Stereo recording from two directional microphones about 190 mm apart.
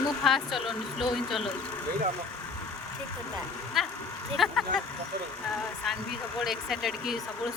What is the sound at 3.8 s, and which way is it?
Speech, centre (ahead or behind).